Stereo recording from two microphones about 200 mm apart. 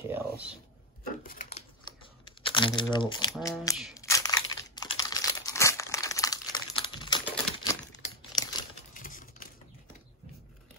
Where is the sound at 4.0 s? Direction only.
20° left (ahead or behind).